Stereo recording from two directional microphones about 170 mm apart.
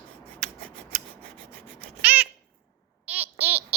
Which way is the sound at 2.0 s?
10° right (ahead or behind).